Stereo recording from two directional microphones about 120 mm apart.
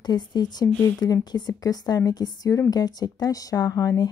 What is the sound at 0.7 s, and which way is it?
Speech, 10° left (ahead or behind).